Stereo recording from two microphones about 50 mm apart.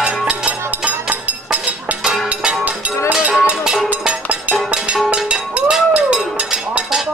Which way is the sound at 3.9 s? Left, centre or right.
Right.